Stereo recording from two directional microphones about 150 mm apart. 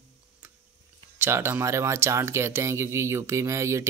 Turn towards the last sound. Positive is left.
turn(degrees=-20)  # may be behind; listen again after turning